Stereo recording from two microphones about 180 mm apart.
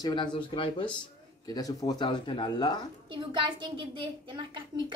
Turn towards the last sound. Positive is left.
turn(degrees=-25)  # may be behind; listen again after turning